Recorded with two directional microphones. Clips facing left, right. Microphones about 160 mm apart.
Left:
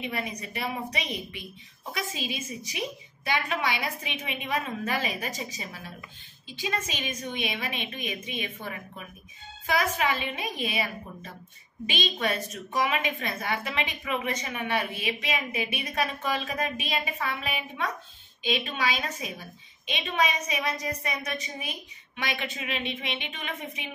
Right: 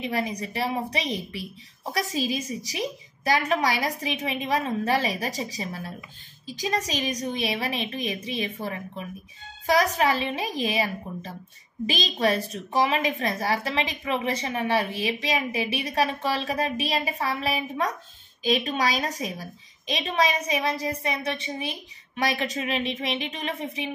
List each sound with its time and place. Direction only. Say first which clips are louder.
0.0 s a woman's voice: right 5 dB; 35° right (ahead or behind)